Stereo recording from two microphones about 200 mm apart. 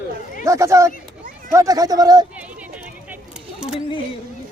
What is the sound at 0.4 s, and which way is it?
Speech, 15° right (ahead or behind).